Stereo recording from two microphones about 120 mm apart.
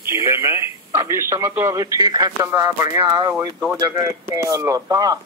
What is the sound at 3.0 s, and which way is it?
Speech, 40° right (ahead or behind).